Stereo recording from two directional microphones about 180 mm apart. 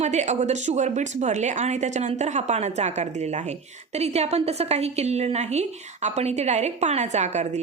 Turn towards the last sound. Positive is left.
turn(degrees=-40)  # may be behind; listen again after turning